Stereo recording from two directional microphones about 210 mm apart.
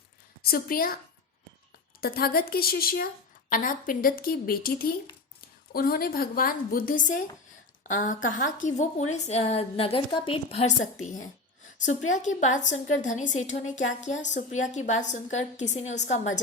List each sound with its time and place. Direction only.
0.4 s a woman's voice: 45° left (ahead or behind)
2.0 s a woman's voice: 45° left (ahead or behind); by 10.8 s 30° left (ahead or behind)
11.9 s a woman's voice: 35° left (ahead or behind)